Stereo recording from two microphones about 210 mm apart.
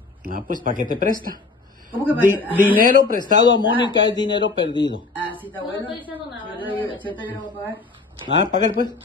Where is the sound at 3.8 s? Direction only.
20° left (ahead or behind).